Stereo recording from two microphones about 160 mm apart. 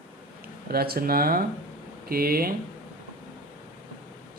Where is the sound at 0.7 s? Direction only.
75° right (ahead or behind).